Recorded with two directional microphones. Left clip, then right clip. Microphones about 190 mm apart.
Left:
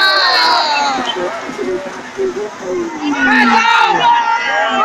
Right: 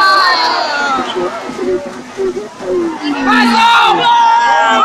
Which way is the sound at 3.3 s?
Centre (ahead or behind).